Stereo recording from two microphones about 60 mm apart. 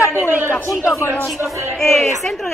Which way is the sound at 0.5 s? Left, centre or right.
Left.